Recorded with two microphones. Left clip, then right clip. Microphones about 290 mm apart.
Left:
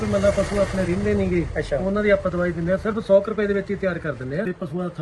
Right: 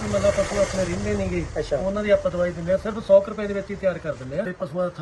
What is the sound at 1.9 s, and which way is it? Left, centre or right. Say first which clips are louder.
A man's voice: left 1 dB; centre.